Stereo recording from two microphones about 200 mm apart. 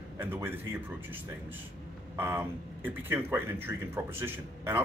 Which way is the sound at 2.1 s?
10° right (ahead or behind).